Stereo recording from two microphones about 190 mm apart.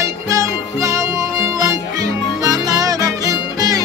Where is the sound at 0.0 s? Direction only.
15° right (ahead or behind).